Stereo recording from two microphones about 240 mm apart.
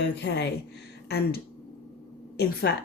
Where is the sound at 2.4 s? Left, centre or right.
Left.